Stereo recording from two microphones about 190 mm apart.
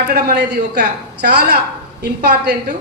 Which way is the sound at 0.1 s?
55° right (ahead or behind).